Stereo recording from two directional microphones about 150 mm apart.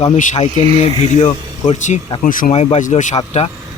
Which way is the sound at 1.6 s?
50° left (ahead or behind).